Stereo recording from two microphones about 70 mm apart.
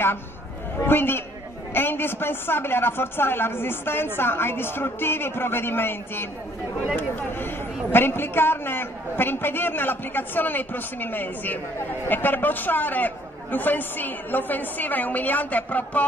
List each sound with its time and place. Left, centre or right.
0.7 s a man's voice: left